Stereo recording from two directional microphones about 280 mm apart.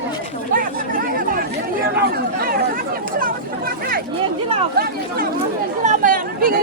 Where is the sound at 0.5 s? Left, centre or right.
Right.